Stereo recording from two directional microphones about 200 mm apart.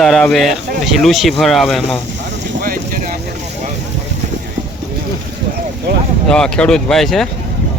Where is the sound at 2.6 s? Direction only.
45° right (ahead or behind).